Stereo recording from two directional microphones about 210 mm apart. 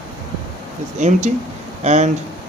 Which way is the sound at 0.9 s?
35° right (ahead or behind).